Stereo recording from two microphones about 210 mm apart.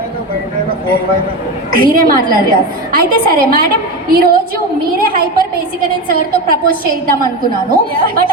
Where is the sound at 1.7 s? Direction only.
45° right (ahead or behind).